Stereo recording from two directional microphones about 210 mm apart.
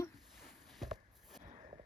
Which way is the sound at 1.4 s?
35° right (ahead or behind).